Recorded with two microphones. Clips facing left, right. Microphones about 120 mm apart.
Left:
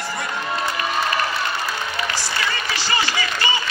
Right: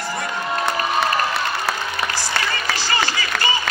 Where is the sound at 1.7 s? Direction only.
70° right (ahead or behind).